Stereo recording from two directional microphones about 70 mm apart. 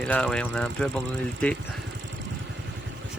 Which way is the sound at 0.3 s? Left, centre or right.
Centre.